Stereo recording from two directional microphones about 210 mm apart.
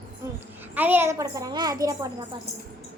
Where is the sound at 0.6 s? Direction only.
10° right (ahead or behind).